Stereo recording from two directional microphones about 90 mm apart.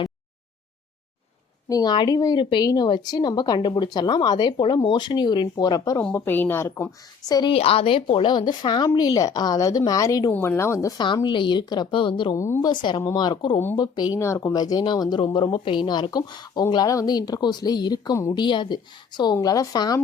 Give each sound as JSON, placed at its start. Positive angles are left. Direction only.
{"t": 1.7, "sound": "speech", "side_deg": 50}
{"t": 2.4, "sound": "speech", "side_deg": 65}
{"t": 2.6, "sound": "speech", "side_deg": 50}
{"t": 6.1, "sound": "a woman's voice", "side_deg": 20}
{"t": 7.3, "sound": "speech", "side_deg": 45}
{"t": 7.5, "sound": "speech", "side_deg": 90}
{"t": 8.3, "sound": "speech", "side_deg": 55}
{"t": 10.4, "sound": "speech", "side_deg": 30}
{"t": 10.9, "sound": "speech", "side_deg": 60}
{"t": 12.3, "sound": "speech", "side_deg": 35}
{"t": 12.6, "sound": "speech", "side_deg": 60}
{"t": 15.2, "sound": "speech", "side_deg": 60}